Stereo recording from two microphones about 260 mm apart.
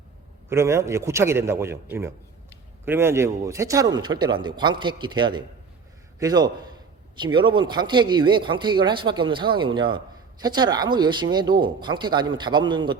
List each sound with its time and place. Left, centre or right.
0.5 s a man's voice: centre